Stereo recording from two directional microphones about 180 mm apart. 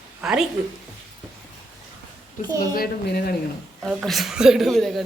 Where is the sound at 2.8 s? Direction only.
55° left (ahead or behind).